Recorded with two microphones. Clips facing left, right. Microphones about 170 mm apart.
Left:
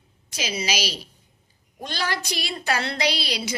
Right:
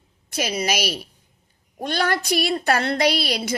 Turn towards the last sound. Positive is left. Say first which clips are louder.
# right 5 dB
turn(degrees=-55)  # may be behind; listen again after turning